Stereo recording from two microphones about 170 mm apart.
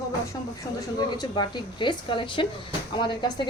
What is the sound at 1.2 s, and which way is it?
Speech, 25° left (ahead or behind).